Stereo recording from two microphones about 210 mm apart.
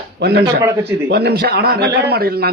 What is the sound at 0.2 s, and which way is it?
A man's voice, 50° right (ahead or behind).